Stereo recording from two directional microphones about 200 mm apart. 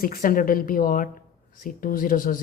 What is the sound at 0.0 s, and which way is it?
Speech, 45° left (ahead or behind).